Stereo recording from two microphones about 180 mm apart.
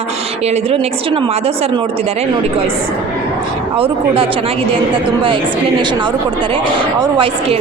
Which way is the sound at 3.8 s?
30° right (ahead or behind).